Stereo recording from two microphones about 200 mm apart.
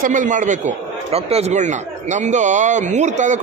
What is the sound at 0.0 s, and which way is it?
Speech, 40° right (ahead or behind).